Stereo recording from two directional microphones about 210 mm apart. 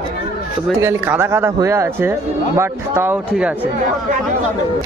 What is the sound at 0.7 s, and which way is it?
A man's voice, 10° right (ahead or behind).